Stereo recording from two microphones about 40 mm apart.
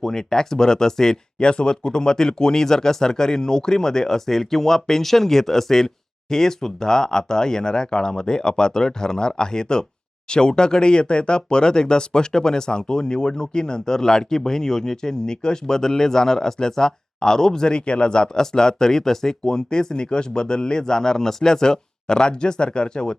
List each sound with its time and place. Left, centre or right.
0.0 s speech: centre